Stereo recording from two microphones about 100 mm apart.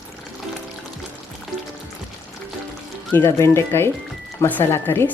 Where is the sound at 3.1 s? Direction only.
25° left (ahead or behind).